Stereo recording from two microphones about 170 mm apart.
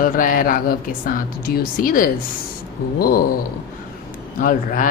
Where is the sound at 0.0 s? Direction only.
55° left (ahead or behind).